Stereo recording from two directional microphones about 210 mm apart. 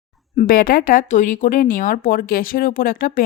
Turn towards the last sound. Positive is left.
turn(degrees=40)  # may be behind; listen again after turning